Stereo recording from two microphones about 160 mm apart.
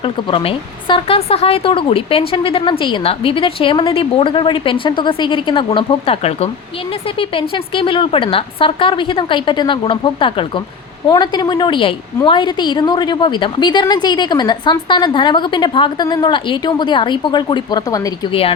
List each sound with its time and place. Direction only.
0.0 s a woman's voice: 35° left (ahead or behind)
18.3 s speech: 35° left (ahead or behind)